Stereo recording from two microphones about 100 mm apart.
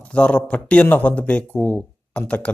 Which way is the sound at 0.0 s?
10° left (ahead or behind).